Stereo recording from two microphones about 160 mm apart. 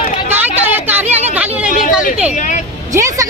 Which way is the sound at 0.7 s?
10° right (ahead or behind).